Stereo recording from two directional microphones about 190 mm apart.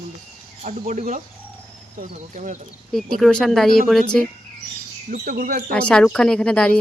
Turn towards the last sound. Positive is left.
turn(degrees=5)  # may be behind; listen again after turning